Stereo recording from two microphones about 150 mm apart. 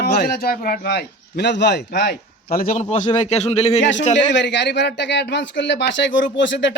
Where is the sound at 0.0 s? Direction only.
90° left.